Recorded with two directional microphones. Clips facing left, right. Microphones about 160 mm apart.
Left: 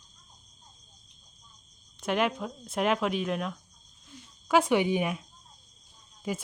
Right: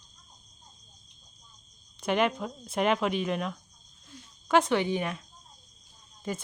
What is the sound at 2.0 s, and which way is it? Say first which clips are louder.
Speech: right 1 dB; centre (ahead or behind).